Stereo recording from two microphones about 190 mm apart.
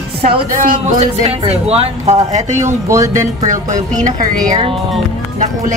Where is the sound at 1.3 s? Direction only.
30° right (ahead or behind).